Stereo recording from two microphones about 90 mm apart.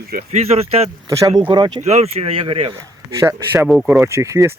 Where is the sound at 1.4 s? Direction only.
60° right (ahead or behind).